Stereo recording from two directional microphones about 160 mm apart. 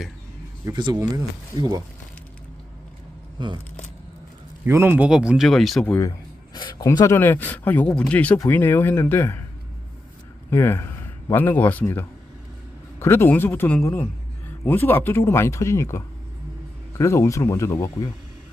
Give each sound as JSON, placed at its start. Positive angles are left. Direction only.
{"t": 0.6, "sound": "speech", "side_deg": -25}
{"t": 3.3, "sound": "speech", "side_deg": -30}
{"t": 4.6, "sound": "speech", "side_deg": -10}
{"t": 5.8, "sound": "speech", "side_deg": 15}
{"t": 10.5, "sound": "a man's voice", "side_deg": 15}